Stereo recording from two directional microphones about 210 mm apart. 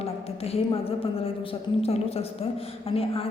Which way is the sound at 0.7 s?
25° left (ahead or behind).